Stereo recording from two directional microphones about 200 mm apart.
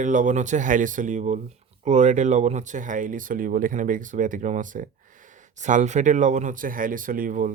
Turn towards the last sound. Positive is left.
turn(degrees=-40)  # may be behind; listen again after turning